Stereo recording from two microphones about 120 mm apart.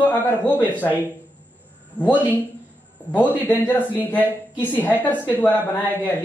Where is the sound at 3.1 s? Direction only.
15° left (ahead or behind).